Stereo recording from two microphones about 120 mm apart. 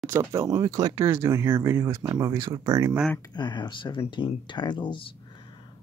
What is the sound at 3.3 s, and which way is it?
Speech, 40° left (ahead or behind).